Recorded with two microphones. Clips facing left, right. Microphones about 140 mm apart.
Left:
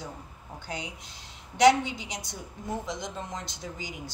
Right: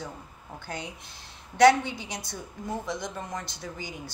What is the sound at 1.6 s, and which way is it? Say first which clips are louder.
A woman's voice: right 1 dB; 20° left (ahead or behind).